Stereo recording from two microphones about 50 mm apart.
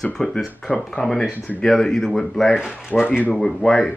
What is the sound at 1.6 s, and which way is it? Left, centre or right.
Speech, centre.